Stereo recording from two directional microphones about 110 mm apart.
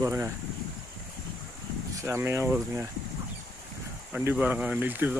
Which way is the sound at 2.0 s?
25° right (ahead or behind).